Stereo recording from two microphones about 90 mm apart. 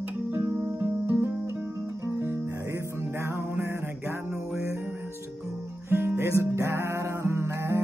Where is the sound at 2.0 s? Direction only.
30° right (ahead or behind).